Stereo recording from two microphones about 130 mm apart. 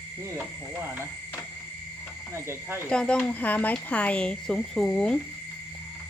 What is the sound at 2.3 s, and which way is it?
Speech, 20° right (ahead or behind).